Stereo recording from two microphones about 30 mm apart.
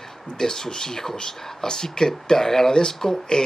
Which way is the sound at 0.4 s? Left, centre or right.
Centre.